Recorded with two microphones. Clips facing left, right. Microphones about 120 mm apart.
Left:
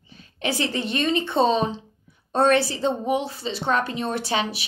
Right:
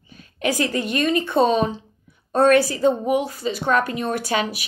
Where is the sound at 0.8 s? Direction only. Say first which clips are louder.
Right 2 dB; 30° left (ahead or behind).